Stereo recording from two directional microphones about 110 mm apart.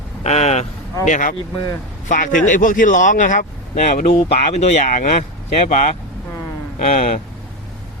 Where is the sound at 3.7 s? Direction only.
90° left.